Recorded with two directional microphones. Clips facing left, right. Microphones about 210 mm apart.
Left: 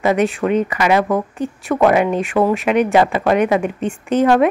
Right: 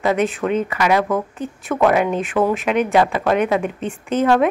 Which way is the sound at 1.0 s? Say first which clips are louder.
Left 3 dB; 15° left (ahead or behind).